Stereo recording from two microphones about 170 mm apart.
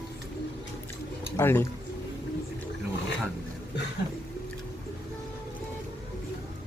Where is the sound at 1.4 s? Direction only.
15° left (ahead or behind).